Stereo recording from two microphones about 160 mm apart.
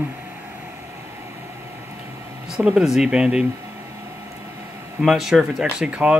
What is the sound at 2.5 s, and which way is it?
Speech, 5° right (ahead or behind).